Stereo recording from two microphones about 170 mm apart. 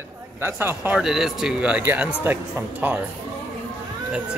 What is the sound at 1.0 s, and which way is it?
Speech, centre (ahead or behind).